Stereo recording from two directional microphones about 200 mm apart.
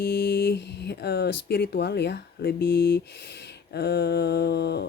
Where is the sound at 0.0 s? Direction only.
55° left (ahead or behind).